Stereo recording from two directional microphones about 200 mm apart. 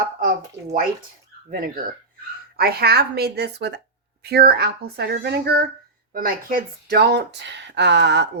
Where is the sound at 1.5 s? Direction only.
45° right (ahead or behind).